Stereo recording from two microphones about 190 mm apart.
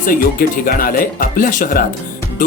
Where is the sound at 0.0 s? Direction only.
45° left (ahead or behind).